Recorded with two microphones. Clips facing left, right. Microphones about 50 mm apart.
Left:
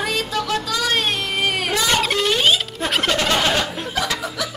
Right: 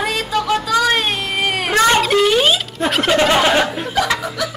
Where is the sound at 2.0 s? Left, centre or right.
Centre.